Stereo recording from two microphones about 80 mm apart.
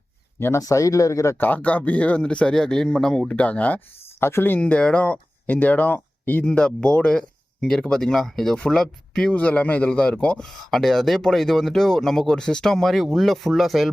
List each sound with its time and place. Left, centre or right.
0.3 s speech: left
0.6 s speech: left
1.4 s speech: left
4.2 s speech: left
6.4 s speech: centre